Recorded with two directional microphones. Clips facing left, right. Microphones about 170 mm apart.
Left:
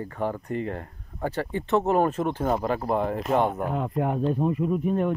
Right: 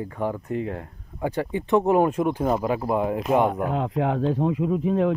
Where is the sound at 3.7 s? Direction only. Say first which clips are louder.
Right 2 dB; 75° right (ahead or behind).